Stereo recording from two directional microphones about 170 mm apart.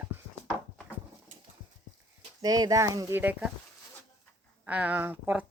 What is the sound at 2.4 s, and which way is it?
Speech, 20° right (ahead or behind).